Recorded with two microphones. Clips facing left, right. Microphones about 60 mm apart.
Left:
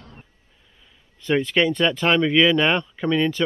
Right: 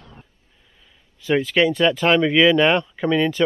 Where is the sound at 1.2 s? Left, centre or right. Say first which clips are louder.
Right 2 dB; centre.